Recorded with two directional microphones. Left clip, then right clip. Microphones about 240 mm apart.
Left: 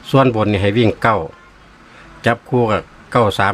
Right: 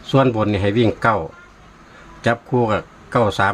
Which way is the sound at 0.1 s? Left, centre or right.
Centre.